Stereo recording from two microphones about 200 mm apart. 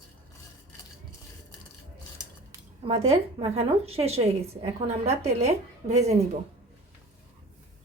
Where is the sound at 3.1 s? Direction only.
30° right (ahead or behind).